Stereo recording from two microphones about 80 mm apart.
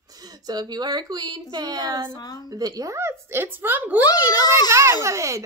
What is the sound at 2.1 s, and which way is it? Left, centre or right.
Speech, left.